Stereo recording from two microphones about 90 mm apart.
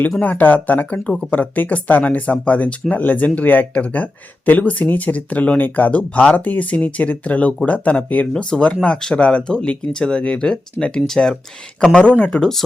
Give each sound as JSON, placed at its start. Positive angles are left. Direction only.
{"t": 0.2, "sound": "speech", "side_deg": 20}